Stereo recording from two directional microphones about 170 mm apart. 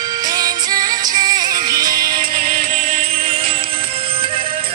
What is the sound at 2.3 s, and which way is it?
Music, 55° right (ahead or behind).